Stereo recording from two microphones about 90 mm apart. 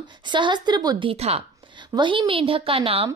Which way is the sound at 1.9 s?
60° right (ahead or behind).